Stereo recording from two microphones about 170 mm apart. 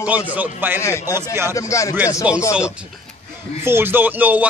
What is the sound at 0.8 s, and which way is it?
A man's voice, 15° left (ahead or behind).